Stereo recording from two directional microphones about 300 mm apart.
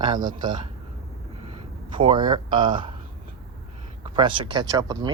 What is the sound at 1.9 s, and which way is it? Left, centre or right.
Speech, centre.